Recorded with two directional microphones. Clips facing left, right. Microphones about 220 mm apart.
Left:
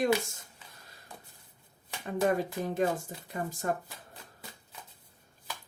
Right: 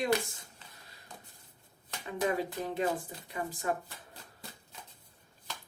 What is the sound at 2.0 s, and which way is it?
Speech, 45° left (ahead or behind).